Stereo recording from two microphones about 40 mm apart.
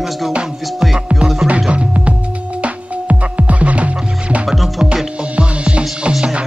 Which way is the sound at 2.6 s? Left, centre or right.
Right.